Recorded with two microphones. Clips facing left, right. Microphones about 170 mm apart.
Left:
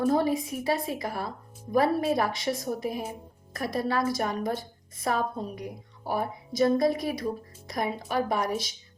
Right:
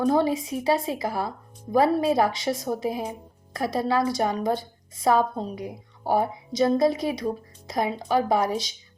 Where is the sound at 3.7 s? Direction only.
25° right (ahead or behind).